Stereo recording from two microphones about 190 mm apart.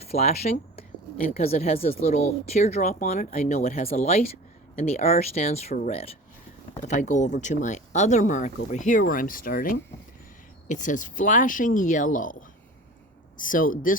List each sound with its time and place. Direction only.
0.2 s speech: 35° left (ahead or behind)
2.8 s speech: 50° left (ahead or behind)
3.1 s speech: 35° left (ahead or behind)